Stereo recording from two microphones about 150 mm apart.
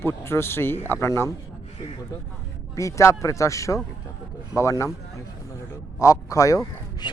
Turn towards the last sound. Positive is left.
turn(degrees=20)  # may be behind; listen again after turning